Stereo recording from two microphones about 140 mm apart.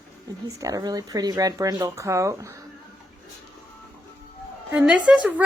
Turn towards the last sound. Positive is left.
turn(degrees=-10)  # may be behind; listen again after turning